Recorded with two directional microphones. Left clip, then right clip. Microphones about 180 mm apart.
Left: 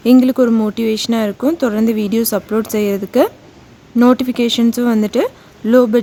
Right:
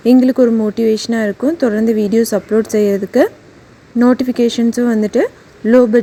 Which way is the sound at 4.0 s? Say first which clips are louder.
Even; 10° right (ahead or behind).